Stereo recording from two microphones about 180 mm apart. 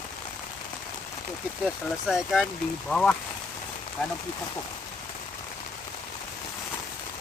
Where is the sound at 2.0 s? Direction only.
Centre (ahead or behind).